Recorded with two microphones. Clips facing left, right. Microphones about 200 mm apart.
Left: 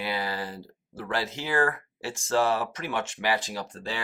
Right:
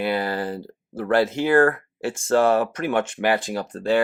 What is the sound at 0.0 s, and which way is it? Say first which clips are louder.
Speech: right 7 dB; 50° right (ahead or behind).